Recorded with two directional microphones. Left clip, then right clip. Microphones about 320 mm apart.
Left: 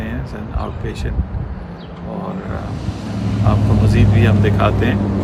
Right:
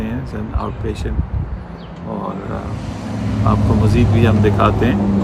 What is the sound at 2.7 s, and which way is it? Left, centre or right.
Vehicle, right.